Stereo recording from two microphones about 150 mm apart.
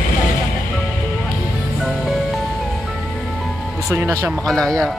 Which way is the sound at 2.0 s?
Centre (ahead or behind).